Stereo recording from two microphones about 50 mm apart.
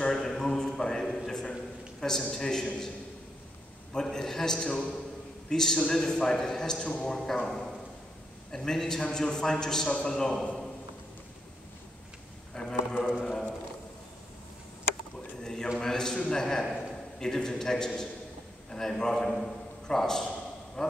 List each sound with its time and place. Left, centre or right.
0.0 s a sound: centre
2.3 s a man's voice: centre
3.9 s a man's voice: centre
10.4 s a sound: centre
12.5 s a man's voice: centre
15.4 s a man's voice: centre